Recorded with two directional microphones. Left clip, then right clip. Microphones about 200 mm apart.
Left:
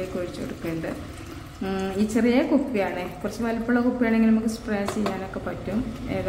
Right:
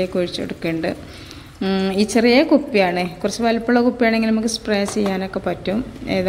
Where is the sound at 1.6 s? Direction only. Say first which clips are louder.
Right 7 dB; 25° right (ahead or behind).